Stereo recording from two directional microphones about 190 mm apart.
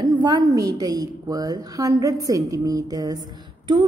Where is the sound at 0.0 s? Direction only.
20° right (ahead or behind).